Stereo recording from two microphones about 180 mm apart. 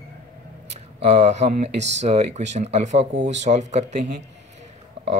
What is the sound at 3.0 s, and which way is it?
Speech, 70° right (ahead or behind).